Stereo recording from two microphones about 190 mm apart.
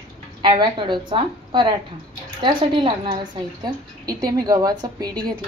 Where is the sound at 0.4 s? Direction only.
25° right (ahead or behind).